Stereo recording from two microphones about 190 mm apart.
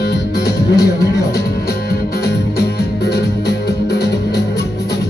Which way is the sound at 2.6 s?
60° left (ahead or behind).